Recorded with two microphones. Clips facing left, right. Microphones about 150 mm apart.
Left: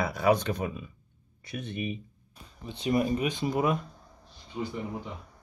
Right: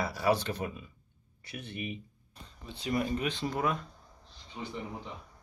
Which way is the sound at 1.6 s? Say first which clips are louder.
Left 5 dB; 20° left (ahead or behind).